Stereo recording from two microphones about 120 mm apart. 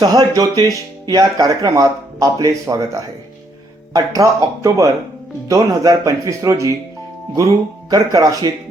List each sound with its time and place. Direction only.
0.0 s music: 35° right (ahead or behind)
1.1 s speech: 30° right (ahead or behind)